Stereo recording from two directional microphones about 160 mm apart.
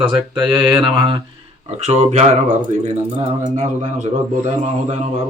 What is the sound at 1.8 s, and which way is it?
Speech, 45° right (ahead or behind).